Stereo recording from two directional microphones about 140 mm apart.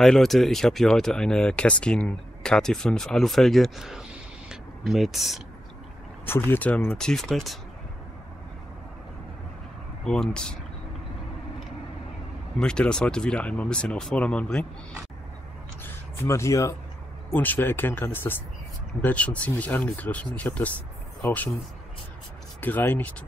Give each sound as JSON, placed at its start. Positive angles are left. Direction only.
{"t": 0.0, "sound": "speech", "side_deg": 0}
{"t": 4.5, "sound": "a sound", "side_deg": 0}
{"t": 6.2, "sound": "speech", "side_deg": 15}
{"t": 10.0, "sound": "speech", "side_deg": 5}
{"t": 12.5, "sound": "speech", "side_deg": 5}
{"t": 15.8, "sound": "a sound", "side_deg": 20}
{"t": 17.3, "sound": "speech", "side_deg": 10}
{"t": 22.6, "sound": "speech", "side_deg": 15}